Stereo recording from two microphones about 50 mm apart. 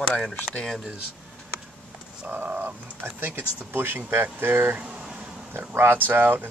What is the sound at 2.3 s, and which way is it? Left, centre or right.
Speech, right.